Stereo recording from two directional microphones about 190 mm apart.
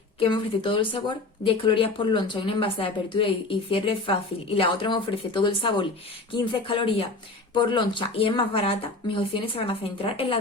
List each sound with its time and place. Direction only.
0.2 s speech: 25° left (ahead or behind)